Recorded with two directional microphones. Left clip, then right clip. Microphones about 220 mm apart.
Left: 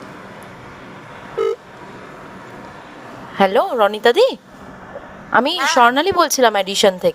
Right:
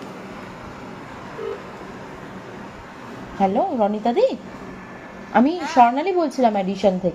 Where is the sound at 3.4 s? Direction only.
40° left (ahead or behind).